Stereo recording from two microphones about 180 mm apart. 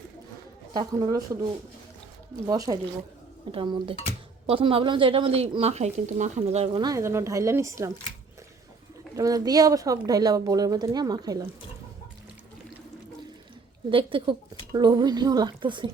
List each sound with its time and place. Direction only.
0.7 s speech: 20° right (ahead or behind)
2.5 s speech: 20° right (ahead or behind)
6.8 s speech: 15° right (ahead or behind)
9.1 s speech: 20° right (ahead or behind)
13.9 s speech: 25° right (ahead or behind)